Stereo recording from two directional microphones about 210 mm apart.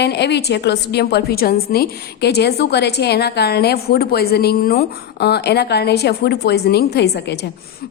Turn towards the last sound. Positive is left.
turn(degrees=55)  # may be behind; listen again after turning